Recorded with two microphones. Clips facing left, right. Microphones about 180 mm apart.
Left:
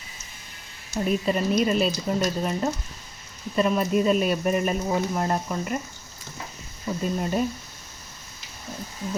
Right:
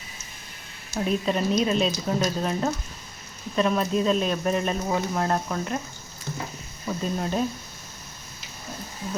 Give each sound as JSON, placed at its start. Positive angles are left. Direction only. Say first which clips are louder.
{"t": 0.9, "sound": "speech", "louder": "left 1 dB", "side_deg": 5}
{"t": 6.8, "sound": "speech", "louder": "left 1 dB", "side_deg": 5}